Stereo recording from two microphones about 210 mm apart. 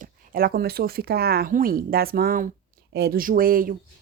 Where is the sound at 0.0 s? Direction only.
45° right (ahead or behind).